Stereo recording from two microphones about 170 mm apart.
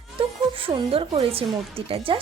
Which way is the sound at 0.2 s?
30° right (ahead or behind).